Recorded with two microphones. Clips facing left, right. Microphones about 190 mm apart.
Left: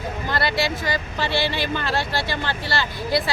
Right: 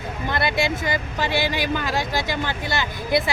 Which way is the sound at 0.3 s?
20° right (ahead or behind).